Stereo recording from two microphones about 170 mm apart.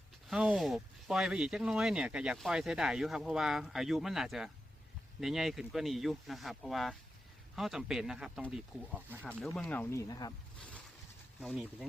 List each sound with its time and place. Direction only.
0.3 s speech: centre (ahead or behind)
9.6 s speech: 10° left (ahead or behind)
11.3 s speech: centre (ahead or behind)